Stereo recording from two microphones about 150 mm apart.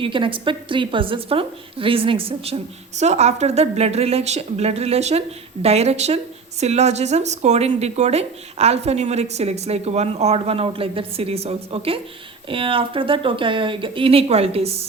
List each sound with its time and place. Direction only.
0.0 s speech: 35° right (ahead or behind)